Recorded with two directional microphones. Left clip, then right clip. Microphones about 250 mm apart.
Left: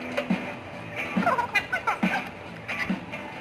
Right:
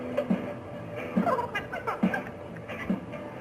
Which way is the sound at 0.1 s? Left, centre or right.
Centre.